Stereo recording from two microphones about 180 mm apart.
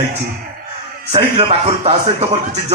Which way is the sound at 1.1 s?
35° right (ahead or behind).